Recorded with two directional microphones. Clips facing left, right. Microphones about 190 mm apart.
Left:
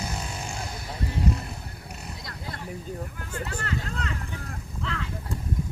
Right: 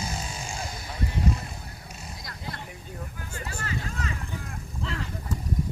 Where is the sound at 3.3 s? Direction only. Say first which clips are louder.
Left 3 dB; 60° left (ahead or behind).